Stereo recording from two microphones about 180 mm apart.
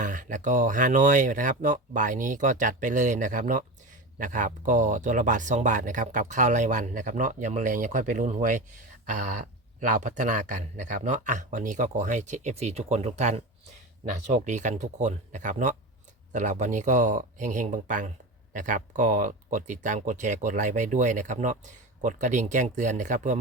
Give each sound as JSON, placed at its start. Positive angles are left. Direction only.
{"t": 0.0, "sound": "speech", "side_deg": -45}